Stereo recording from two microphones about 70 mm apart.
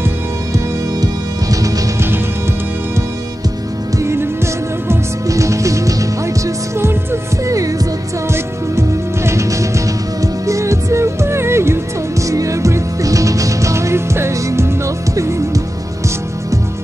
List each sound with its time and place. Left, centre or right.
1.0 s music: right
4.0 s music: right
6.8 s music: right
7.5 s music: right
8.3 s music: right